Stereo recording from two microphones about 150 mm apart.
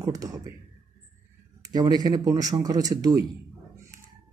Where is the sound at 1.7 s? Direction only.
25° right (ahead or behind).